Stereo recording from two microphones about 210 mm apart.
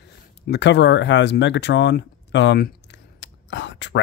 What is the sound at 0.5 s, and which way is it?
Speech, 55° left (ahead or behind).